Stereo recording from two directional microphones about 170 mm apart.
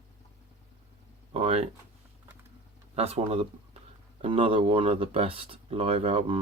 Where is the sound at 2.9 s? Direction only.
35° right (ahead or behind).